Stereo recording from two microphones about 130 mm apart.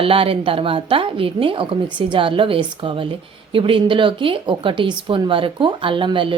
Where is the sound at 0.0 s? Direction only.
45° right (ahead or behind).